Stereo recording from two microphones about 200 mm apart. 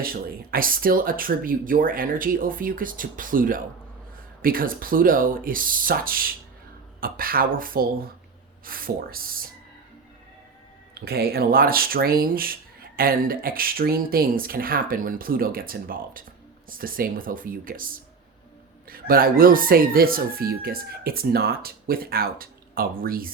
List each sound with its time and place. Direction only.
0.0 s speech: 45° right (ahead or behind)
11.0 s speech: 50° right (ahead or behind)